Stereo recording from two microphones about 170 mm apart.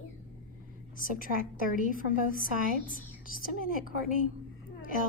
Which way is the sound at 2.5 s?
55° right (ahead or behind).